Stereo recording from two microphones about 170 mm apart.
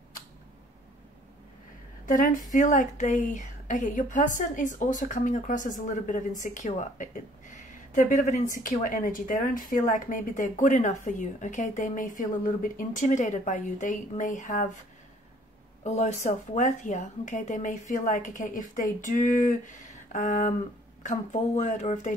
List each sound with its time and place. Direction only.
2.0 s a woman's voice: 50° left (ahead or behind)
15.8 s a woman's voice: 40° left (ahead or behind)